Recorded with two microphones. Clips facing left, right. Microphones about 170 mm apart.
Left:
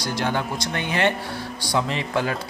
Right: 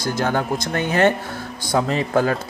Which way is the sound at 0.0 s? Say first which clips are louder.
Right 3 dB; 45° right (ahead or behind).